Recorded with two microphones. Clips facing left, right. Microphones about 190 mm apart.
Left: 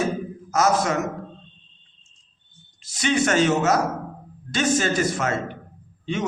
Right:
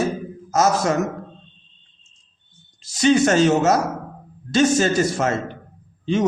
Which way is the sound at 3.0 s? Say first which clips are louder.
Right 5 dB; 40° right (ahead or behind).